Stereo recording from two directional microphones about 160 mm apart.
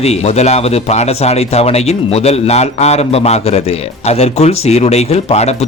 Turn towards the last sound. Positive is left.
turn(degrees=40)  # may be behind; listen again after turning